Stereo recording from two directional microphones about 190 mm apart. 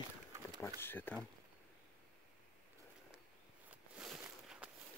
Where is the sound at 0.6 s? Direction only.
10° left (ahead or behind).